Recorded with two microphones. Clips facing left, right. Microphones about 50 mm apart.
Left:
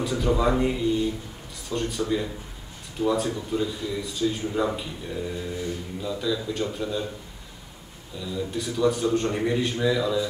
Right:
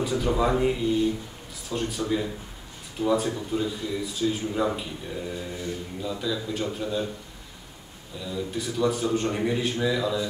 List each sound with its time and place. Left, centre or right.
0.0 s speech: centre
8.2 s speech: centre